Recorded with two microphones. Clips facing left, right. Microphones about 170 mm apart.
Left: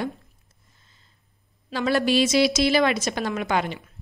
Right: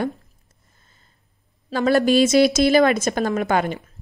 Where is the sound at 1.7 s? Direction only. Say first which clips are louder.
Right 5 dB; 45° right (ahead or behind).